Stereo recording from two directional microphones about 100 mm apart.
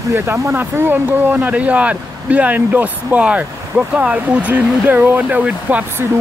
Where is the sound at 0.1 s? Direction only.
25° right (ahead or behind).